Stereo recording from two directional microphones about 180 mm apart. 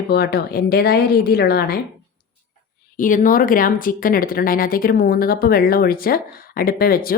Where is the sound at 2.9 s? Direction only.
50° left (ahead or behind).